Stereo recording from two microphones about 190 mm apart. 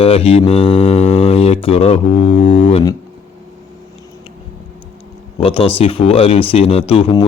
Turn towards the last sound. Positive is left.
turn(degrees=30)  # may be behind; listen again after turning